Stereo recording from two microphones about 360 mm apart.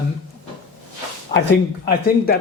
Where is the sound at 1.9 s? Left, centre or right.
Left.